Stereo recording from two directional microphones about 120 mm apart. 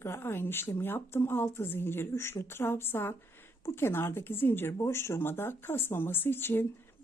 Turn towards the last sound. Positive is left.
turn(degrees=20)  # may be behind; listen again after turning